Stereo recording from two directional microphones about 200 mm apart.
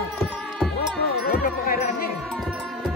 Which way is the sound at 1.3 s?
45° left (ahead or behind).